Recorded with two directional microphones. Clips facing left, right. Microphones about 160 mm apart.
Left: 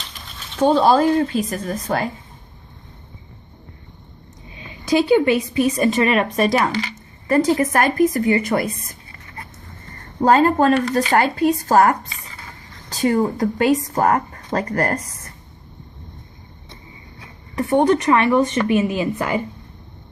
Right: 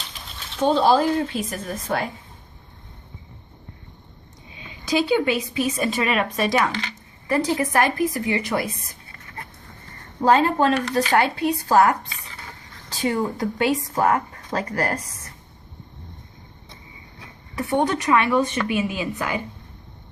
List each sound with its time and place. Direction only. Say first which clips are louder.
0.6 s speech: left 3 dB; 50° left (ahead or behind)
4.9 s speech: left 5 dB; 50° left (ahead or behind)
6.7 s speech: left 5 dB; centre (ahead or behind)
7.3 s speech: left 5 dB; 50° left (ahead or behind)
10.2 s speech: left 3 dB; 45° left (ahead or behind)
17.5 s a woman's voice: left 6 dB; 40° left (ahead or behind)